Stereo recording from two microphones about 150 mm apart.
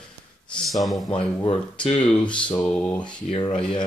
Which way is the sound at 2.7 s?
5° left (ahead or behind).